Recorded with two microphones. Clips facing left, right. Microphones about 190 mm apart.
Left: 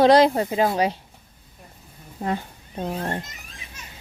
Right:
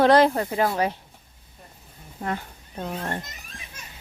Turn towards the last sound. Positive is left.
turn(degrees=15)  # may be behind; listen again after turning